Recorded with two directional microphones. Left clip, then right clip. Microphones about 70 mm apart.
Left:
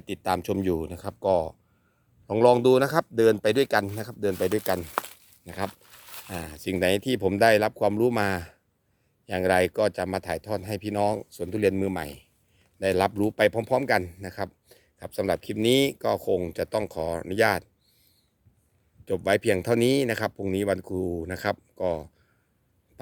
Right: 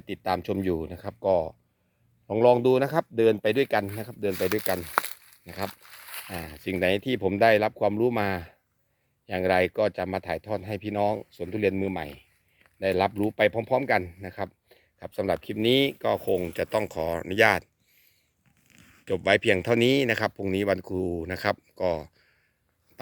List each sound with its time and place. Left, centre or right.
0.0 s speech: left
6.1 s speech: left; by 17.7 s centre
19.0 s speech: centre